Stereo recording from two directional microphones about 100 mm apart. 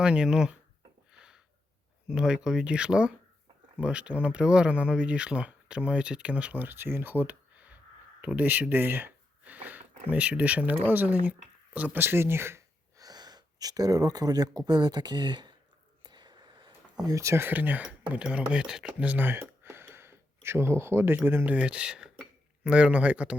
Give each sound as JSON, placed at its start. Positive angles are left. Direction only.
{"t": 0.0, "sound": "speech", "side_deg": -10}
{"t": 1.1, "sound": "a sound", "side_deg": -10}
{"t": 2.0, "sound": "speech", "side_deg": -10}
{"t": 13.0, "sound": "speech", "side_deg": -40}
{"t": 16.0, "sound": "whispering", "side_deg": -45}
{"t": 17.0, "sound": "speech", "side_deg": -35}